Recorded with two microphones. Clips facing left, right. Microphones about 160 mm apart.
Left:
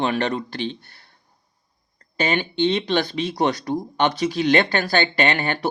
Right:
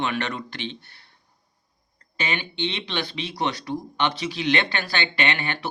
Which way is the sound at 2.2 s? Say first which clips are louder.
Left 7 dB; 40° left (ahead or behind).